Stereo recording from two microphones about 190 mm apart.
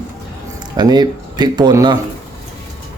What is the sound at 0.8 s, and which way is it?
Speech, 20° right (ahead or behind).